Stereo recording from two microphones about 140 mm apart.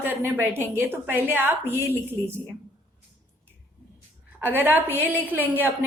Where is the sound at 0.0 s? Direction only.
15° right (ahead or behind).